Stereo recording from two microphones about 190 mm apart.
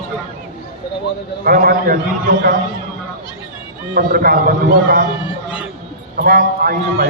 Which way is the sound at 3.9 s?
50° right (ahead or behind).